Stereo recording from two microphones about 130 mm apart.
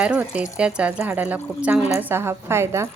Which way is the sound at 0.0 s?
10° right (ahead or behind).